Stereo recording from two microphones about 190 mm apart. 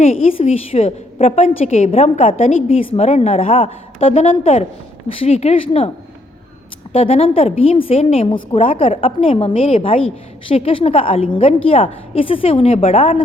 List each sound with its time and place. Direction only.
0.0 s a woman's voice: 30° left (ahead or behind)
6.9 s a woman's voice: 30° left (ahead or behind)